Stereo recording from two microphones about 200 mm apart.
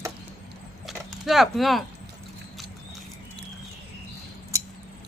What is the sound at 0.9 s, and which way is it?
Clip-clop, centre (ahead or behind).